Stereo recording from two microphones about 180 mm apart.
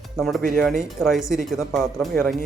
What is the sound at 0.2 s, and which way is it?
Speech, centre (ahead or behind).